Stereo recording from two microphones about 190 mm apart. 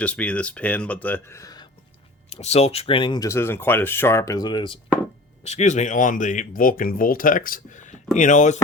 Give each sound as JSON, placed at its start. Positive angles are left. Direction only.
{"t": 0.0, "sound": "speech", "side_deg": 5}
{"t": 2.3, "sound": "speech", "side_deg": 35}
{"t": 5.4, "sound": "speech", "side_deg": 35}